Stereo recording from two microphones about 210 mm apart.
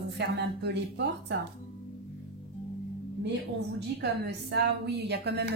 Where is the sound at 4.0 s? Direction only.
50° right (ahead or behind).